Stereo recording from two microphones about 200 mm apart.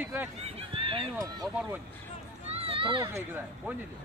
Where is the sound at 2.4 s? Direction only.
30° right (ahead or behind).